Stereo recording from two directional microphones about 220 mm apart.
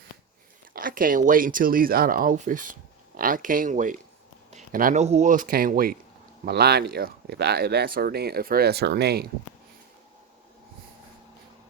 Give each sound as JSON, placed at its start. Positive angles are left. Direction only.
{"t": 0.7, "sound": "speech", "side_deg": -40}